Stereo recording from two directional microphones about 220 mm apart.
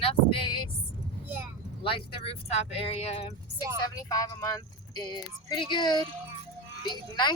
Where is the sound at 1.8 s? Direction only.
25° left (ahead or behind).